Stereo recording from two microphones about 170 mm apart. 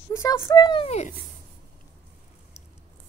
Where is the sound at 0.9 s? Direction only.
40° left (ahead or behind).